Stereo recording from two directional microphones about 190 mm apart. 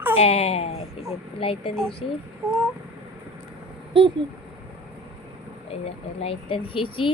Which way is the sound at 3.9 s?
25° right (ahead or behind).